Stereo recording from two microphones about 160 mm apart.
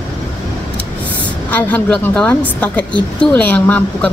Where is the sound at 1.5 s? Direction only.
10° left (ahead or behind).